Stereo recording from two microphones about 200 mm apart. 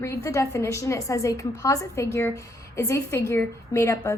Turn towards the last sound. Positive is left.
turn(degrees=15)  # may be behind; listen again after turning